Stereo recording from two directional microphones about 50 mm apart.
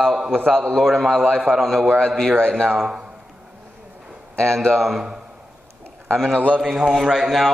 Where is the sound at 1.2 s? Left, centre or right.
Right.